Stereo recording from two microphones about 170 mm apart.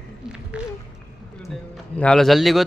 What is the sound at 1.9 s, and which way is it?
Speech, 5° left (ahead or behind).